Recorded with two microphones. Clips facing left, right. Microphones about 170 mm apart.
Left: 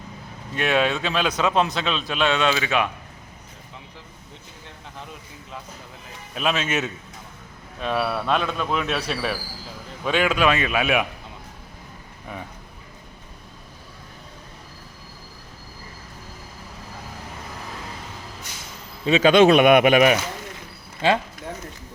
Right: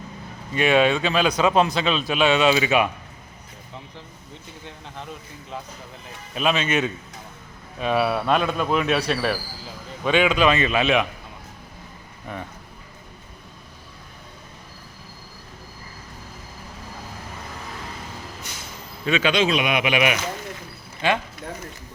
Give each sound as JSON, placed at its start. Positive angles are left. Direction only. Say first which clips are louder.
{"t": 0.5, "sound": "speech", "louder": "right 3 dB", "side_deg": 0}
{"t": 6.3, "sound": "speech", "louder": "right 2 dB", "side_deg": 0}
{"t": 12.3, "sound": "speech", "louder": "right 2 dB", "side_deg": 0}
{"t": 19.0, "sound": "a man's voice", "louder": "left 4 dB", "side_deg": 35}
{"t": 19.3, "sound": "speech", "louder": "left 11 dB", "side_deg": 55}
{"t": 21.0, "sound": "speech", "louder": "left 2 dB", "side_deg": 30}